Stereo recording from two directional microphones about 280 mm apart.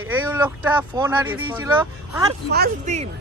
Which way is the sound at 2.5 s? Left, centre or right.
Right.